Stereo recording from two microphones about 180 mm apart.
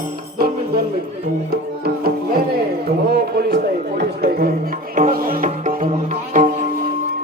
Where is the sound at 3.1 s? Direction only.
60° right (ahead or behind).